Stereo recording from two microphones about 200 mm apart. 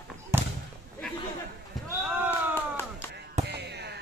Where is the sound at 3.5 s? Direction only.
55° right (ahead or behind).